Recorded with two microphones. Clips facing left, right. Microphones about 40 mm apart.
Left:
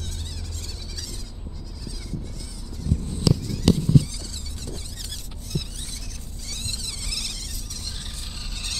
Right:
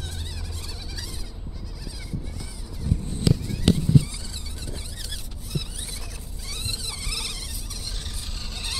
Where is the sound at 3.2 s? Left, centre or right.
Right.